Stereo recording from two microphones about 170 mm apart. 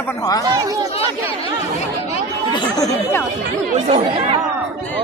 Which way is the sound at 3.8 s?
35° right (ahead or behind).